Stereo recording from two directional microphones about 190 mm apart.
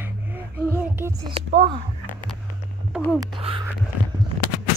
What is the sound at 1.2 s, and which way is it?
Speech, 30° right (ahead or behind).